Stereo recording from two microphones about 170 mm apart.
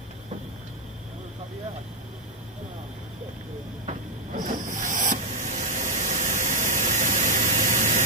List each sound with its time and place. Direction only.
4.4 s hiss: 50° right (ahead or behind)